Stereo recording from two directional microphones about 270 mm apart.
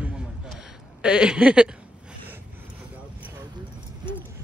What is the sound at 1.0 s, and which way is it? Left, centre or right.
Speech, centre.